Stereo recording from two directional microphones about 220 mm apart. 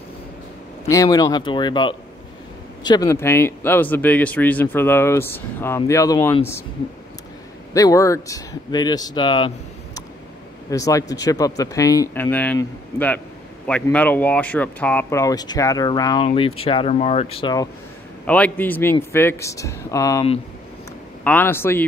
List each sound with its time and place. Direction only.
0.8 s speech: 15° left (ahead or behind)
7.7 s speech: 15° left (ahead or behind)
10.7 s speech: 15° left (ahead or behind)
18.2 s speech: 5° left (ahead or behind)